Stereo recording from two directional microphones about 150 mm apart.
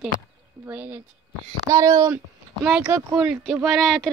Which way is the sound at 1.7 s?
25° right (ahead or behind).